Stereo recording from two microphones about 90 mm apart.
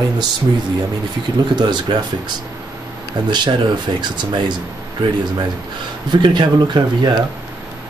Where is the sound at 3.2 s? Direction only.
55° right (ahead or behind).